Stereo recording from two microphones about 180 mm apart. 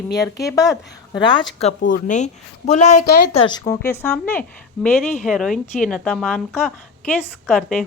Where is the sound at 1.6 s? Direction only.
40° left (ahead or behind).